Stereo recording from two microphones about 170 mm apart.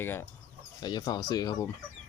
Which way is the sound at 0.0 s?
15° left (ahead or behind).